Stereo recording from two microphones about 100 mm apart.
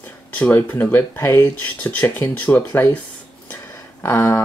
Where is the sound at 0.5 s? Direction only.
20° left (ahead or behind).